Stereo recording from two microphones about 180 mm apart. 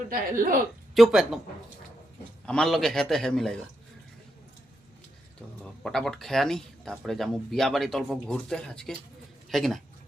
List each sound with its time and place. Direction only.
0.1 s speech: 50° right (ahead or behind)
0.9 s speech: centre (ahead or behind)
2.5 s speech: centre (ahead or behind)
5.8 s speech: 5° left (ahead or behind)